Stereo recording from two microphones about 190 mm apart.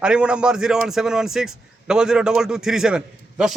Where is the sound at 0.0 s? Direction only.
5° right (ahead or behind).